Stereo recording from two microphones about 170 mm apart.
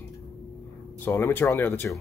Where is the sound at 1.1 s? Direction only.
10° left (ahead or behind).